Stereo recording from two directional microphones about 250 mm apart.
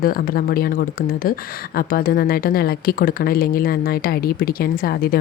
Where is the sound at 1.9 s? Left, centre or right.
Left.